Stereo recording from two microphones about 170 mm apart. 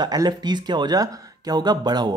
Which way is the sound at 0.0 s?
25° right (ahead or behind).